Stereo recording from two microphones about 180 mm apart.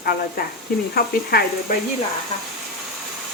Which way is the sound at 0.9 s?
60° left (ahead or behind).